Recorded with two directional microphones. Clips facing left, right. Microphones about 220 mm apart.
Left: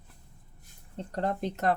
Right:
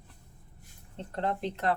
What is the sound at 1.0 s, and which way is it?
Speech, 40° left (ahead or behind).